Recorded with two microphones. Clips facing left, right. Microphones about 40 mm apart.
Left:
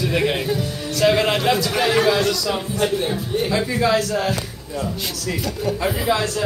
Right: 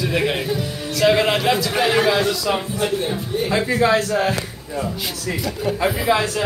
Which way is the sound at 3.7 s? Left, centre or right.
Right.